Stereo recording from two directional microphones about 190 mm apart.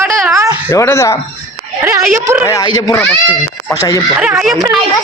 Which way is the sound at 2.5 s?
20° left (ahead or behind).